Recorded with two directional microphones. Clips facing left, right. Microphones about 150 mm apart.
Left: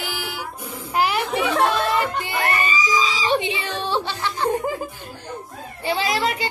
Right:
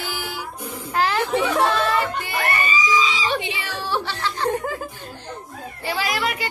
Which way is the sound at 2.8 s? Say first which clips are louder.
Right 1 dB; 40° left (ahead or behind).